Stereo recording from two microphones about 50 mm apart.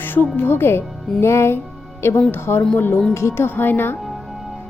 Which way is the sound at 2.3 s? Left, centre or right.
Left.